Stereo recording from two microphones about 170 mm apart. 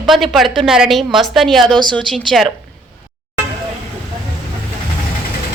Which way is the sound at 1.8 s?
25° right (ahead or behind).